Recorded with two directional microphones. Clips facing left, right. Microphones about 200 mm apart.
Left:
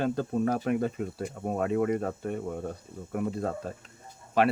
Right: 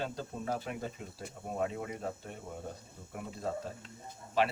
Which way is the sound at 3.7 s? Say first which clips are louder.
Left 5 dB; 55° left (ahead or behind).